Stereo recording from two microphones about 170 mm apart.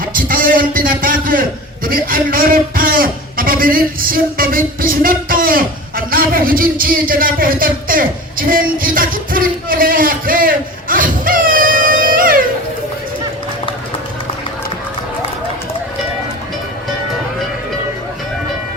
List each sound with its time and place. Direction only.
0.0 s a man's voice: 55° right (ahead or behind)